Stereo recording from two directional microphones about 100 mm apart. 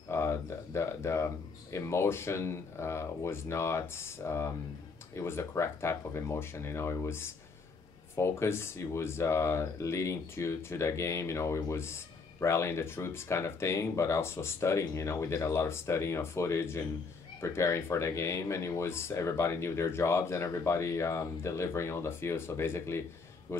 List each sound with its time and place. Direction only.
0.1 s speech: 25° left (ahead or behind)